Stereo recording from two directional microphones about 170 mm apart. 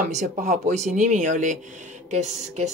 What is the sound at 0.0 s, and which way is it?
Speech, 45° right (ahead or behind).